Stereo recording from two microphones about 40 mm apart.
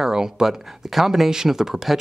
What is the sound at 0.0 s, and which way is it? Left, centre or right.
Speech, centre.